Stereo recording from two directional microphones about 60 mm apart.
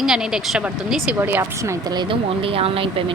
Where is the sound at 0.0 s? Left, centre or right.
Centre.